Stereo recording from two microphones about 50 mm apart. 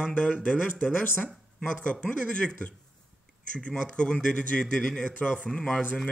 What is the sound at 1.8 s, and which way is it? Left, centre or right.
Speech, left.